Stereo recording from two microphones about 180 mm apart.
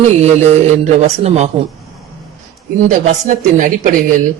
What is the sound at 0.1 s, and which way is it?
A man's voice, 40° right (ahead or behind).